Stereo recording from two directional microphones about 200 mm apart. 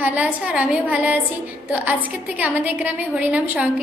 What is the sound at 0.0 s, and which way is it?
A woman's voice, 5° right (ahead or behind).